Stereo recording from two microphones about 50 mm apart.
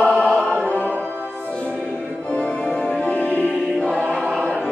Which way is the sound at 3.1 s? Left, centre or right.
Left.